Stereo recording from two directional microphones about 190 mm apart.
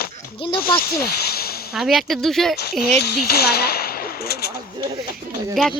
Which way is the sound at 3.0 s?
60° left (ahead or behind).